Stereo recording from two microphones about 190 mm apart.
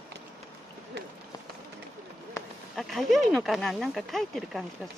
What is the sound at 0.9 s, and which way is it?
Run, 60° right (ahead or behind).